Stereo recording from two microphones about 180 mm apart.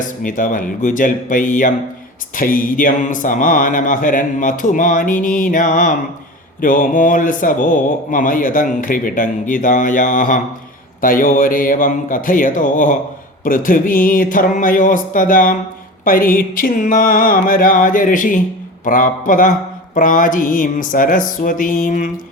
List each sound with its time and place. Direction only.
0.2 s speech: 50° left (ahead or behind)